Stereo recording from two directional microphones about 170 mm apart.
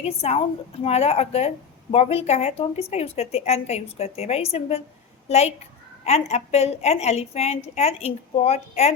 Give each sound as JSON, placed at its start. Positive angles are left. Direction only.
{"t": 0.0, "sound": "speech", "side_deg": 35}